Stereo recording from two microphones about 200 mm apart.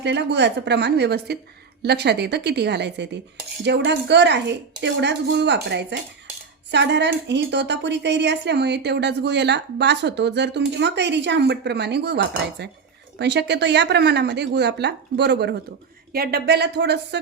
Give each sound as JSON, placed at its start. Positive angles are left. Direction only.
{"t": 0.0, "sound": "a woman's voice", "side_deg": -60}